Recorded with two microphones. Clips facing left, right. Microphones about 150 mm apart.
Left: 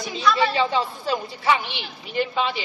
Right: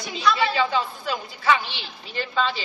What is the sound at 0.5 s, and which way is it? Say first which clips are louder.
Speech: left 1 dB; 30° left (ahead or behind).